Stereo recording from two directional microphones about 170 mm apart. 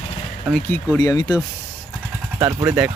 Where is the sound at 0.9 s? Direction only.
20° left (ahead or behind).